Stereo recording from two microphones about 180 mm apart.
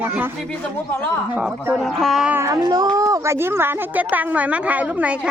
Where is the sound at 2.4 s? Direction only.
20° right (ahead or behind).